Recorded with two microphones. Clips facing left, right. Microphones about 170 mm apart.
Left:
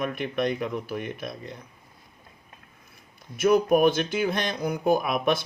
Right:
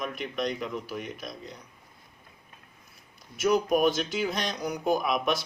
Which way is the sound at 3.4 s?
55° left (ahead or behind).